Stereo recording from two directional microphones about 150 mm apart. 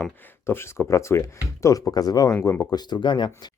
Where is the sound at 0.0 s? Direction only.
15° left (ahead or behind).